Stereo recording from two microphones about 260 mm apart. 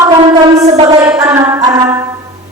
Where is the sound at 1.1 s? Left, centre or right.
Centre.